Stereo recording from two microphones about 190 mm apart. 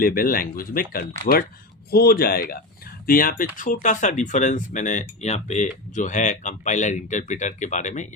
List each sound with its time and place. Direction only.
0.0 s speech: 50° left (ahead or behind)